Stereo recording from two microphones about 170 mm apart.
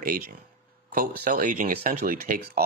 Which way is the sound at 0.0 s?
60° right (ahead or behind).